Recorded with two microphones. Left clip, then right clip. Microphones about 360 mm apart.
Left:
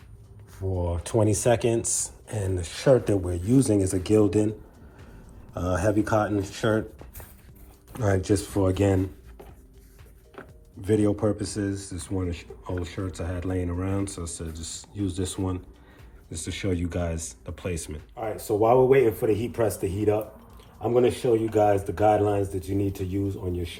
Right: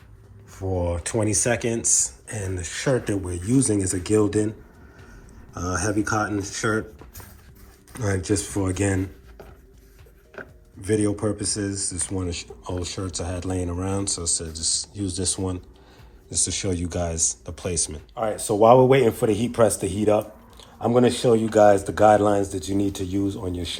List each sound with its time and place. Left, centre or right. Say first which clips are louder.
0.5 s speech: right 5 dB; centre
5.5 s speech: left 1 dB; centre
7.9 s speech: left 1 dB; centre
10.8 s speech: even; centre
18.1 s speech: right 3 dB; right